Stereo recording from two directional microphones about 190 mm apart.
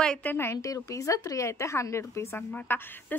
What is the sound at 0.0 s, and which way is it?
A woman's voice, 5° left (ahead or behind).